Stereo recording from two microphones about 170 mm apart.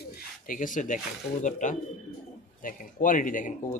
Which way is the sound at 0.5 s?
50° left (ahead or behind).